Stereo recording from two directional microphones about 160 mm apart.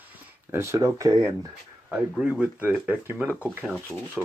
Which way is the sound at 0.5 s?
15° right (ahead or behind).